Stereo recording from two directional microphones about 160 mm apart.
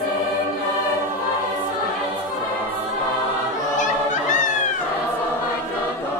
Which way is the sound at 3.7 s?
50° left (ahead or behind).